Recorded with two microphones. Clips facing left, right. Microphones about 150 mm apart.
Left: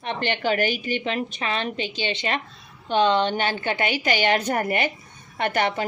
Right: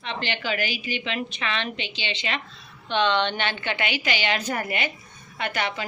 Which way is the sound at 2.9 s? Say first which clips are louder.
Left 3 dB; 40° left (ahead or behind).